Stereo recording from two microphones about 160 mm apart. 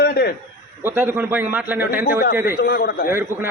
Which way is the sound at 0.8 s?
15° right (ahead or behind).